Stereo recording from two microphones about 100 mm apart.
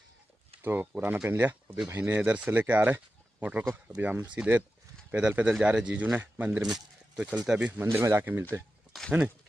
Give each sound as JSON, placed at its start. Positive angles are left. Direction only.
{"t": 0.6, "sound": "speech", "side_deg": -20}
{"t": 7.8, "sound": "speech", "side_deg": -25}